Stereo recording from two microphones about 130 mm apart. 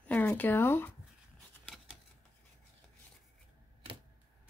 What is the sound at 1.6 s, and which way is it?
Typewriter, 5° right (ahead or behind).